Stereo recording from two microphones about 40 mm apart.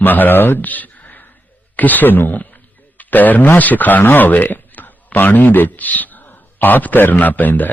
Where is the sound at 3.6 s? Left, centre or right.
Left.